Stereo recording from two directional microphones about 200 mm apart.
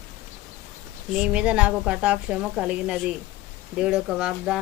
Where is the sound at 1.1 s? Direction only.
5° right (ahead or behind).